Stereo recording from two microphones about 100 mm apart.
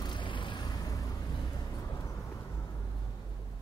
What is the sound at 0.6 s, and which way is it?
Vehicle, 40° left (ahead or behind).